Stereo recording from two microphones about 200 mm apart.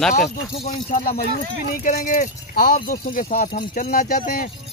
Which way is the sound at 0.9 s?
50° left (ahead or behind).